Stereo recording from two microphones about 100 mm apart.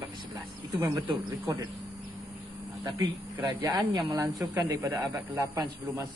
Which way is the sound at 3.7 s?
45° right (ahead or behind).